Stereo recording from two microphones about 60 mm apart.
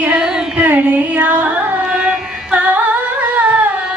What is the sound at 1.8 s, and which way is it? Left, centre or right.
Carnatic music, centre.